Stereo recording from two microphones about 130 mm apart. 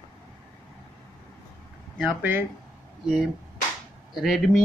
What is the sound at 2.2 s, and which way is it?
Speech, 15° right (ahead or behind).